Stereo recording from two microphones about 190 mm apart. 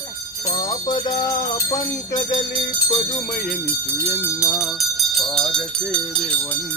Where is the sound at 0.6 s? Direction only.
20° left (ahead or behind).